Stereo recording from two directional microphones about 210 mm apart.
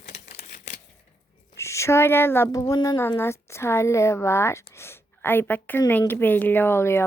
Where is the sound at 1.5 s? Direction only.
15° left (ahead or behind).